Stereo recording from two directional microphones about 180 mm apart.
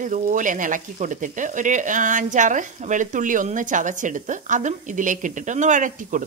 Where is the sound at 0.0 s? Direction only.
45° right (ahead or behind).